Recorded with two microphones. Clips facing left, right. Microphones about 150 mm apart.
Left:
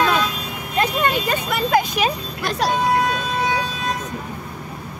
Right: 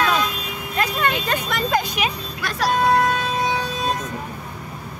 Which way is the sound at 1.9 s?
30° left (ahead or behind).